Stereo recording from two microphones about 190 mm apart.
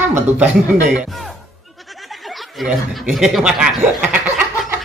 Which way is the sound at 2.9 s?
Centre (ahead or behind).